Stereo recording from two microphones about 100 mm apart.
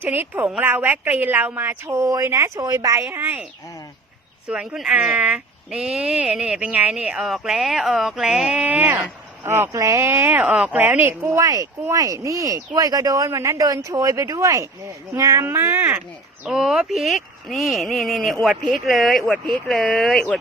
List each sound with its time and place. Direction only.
0.0 s a woman's voice: 20° right (ahead or behind)
4.4 s speech: 5° right (ahead or behind)
8.6 s speech: 15° right (ahead or behind)
9.4 s a woman's voice: 25° right (ahead or behind)
16.4 s speech: 10° right (ahead or behind); by 20.2 s 10° left (ahead or behind)